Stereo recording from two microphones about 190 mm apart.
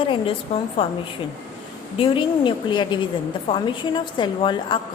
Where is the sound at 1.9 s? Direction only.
25° left (ahead or behind).